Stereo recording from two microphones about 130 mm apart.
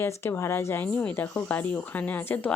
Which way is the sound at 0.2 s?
20° left (ahead or behind).